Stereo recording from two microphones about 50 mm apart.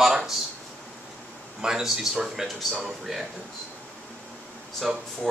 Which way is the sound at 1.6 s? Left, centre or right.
Centre.